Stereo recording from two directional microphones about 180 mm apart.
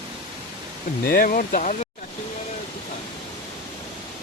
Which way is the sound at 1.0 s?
50° left (ahead or behind).